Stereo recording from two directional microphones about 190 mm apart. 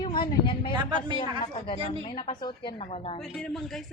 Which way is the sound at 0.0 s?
25° left (ahead or behind).